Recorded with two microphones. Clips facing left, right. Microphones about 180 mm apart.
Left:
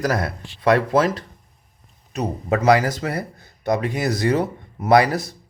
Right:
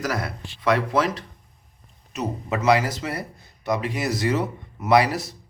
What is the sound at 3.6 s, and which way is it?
Speech, 35° left (ahead or behind).